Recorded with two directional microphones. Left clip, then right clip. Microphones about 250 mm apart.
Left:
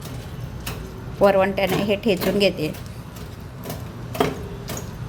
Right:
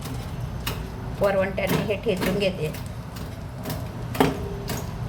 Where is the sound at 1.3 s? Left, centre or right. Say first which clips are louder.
Left 5 dB; left.